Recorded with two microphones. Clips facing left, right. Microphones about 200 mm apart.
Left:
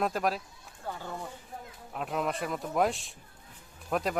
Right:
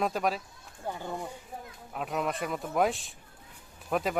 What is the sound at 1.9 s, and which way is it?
Speech, centre (ahead or behind).